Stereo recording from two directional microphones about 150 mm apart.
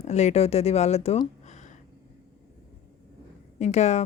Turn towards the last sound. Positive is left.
turn(degrees=50)  # may be behind; listen again after turning